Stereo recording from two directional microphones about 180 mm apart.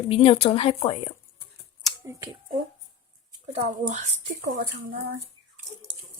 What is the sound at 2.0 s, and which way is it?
Speech, 20° right (ahead or behind).